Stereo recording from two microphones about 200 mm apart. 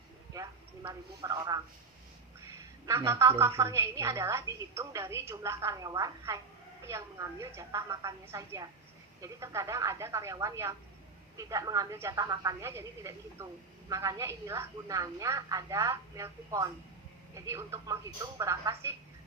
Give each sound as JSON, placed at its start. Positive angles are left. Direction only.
{"t": 0.3, "sound": "a man's voice", "side_deg": -20}
{"t": 2.8, "sound": "a woman's voice", "side_deg": -15}